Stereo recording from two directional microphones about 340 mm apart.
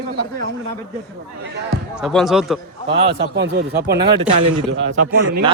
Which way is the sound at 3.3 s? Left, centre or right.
Right.